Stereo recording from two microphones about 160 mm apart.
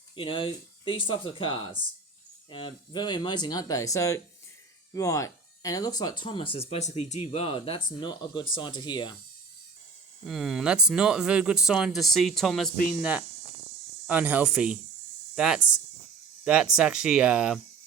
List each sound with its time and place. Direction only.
0.2 s speech: 35° left (ahead or behind)
10.2 s speech: centre (ahead or behind)
12.7 s speech: 55° left (ahead or behind)
13.0 s speech: 10° right (ahead or behind)